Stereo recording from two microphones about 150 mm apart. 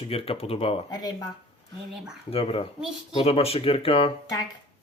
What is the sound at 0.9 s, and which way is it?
Speech, 25° left (ahead or behind).